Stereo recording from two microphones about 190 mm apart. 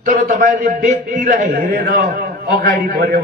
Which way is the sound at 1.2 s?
55° right (ahead or behind).